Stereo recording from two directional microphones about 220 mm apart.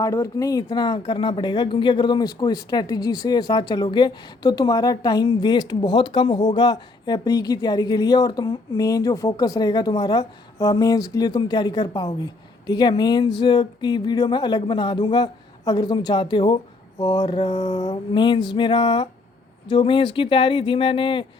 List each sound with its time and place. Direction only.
0.0 s speech: 15° left (ahead or behind)